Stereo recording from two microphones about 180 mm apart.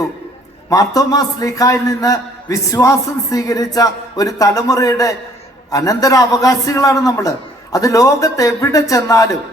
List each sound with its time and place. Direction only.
0.7 s a man's voice: 20° left (ahead or behind)